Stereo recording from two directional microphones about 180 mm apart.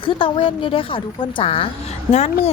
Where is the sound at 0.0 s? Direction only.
30° left (ahead or behind).